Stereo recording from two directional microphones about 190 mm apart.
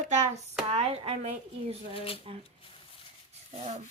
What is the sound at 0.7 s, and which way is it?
Speech, 35° right (ahead or behind).